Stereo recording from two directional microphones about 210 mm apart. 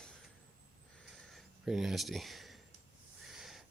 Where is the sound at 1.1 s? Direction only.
Centre (ahead or behind).